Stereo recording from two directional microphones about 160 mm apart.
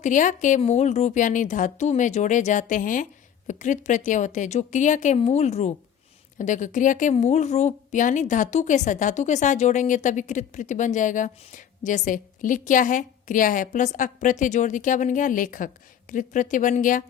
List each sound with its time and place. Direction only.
0.0 s speech: 50° left (ahead or behind)